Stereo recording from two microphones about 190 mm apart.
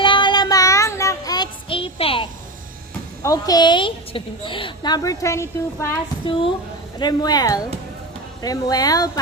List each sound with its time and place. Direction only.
0.0 s child singing: 25° left (ahead or behind)
3.2 s a woman's voice: 20° left (ahead or behind)
6.2 s a woman's voice: 30° left (ahead or behind)